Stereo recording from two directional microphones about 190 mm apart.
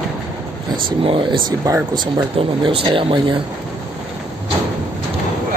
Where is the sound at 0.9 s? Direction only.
25° right (ahead or behind).